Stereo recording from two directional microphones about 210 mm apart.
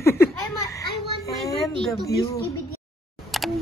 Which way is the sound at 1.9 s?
20° left (ahead or behind).